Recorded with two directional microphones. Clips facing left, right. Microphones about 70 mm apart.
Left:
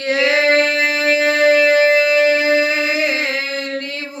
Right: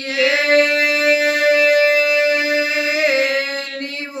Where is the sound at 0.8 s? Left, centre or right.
Left.